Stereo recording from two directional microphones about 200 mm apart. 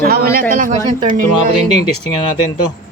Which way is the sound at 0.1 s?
50° right (ahead or behind).